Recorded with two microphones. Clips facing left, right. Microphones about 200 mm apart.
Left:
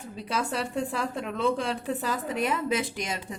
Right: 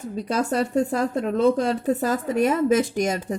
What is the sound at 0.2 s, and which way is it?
A woman's voice, 45° right (ahead or behind).